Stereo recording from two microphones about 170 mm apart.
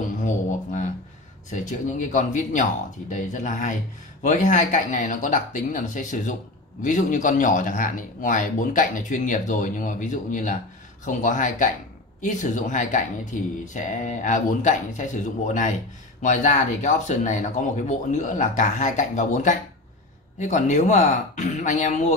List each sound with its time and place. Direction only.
1.5 s speech: 45° left (ahead or behind)